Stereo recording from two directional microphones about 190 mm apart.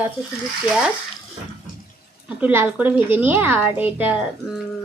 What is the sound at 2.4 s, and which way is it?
A woman's voice, 10° right (ahead or behind).